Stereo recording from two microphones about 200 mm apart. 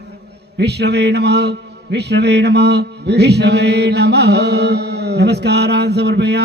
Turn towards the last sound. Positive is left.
turn(degrees=-55)  # may be behind; listen again after turning